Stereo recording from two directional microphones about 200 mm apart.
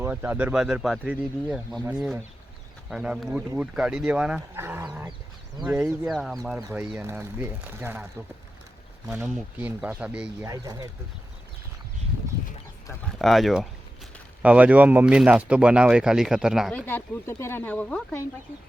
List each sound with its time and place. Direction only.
0.0 s speech: 10° right (ahead or behind)
6.6 s speech: 15° right (ahead or behind)
9.0 s speech: 5° right (ahead or behind)
10.4 s speech: 15° right (ahead or behind)
13.1 s speech: centre (ahead or behind)
16.8 s speech: 10° left (ahead or behind)